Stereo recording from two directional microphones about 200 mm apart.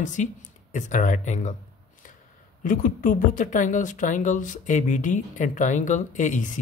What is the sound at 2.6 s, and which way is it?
Speech, 40° left (ahead or behind).